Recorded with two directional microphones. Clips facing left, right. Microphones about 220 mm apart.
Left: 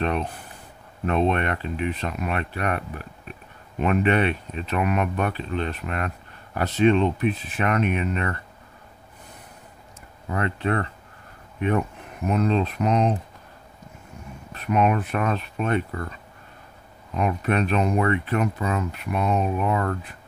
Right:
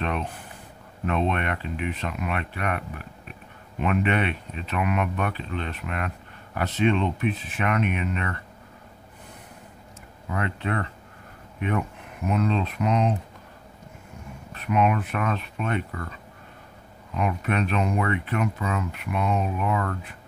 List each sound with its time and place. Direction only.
1.0 s speech: 35° left (ahead or behind)
10.3 s speech: 35° left (ahead or behind)
12.3 s speech: 40° left (ahead or behind)
14.5 s speech: 40° left (ahead or behind)
17.2 s speech: 40° left (ahead or behind)